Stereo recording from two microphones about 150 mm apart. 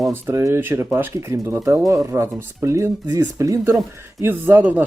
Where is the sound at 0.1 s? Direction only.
20° right (ahead or behind).